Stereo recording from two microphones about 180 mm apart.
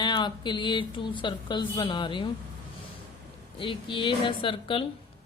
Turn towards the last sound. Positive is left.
turn(degrees=30)  # may be behind; listen again after turning